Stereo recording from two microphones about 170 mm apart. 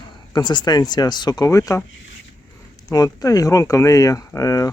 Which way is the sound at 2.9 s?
20° left (ahead or behind).